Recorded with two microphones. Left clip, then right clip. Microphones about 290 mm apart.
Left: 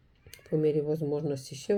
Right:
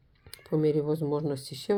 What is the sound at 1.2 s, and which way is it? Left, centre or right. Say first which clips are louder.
Speech: right 1 dB; right.